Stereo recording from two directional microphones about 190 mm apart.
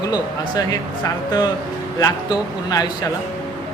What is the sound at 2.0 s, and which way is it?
Speech, 20° left (ahead or behind).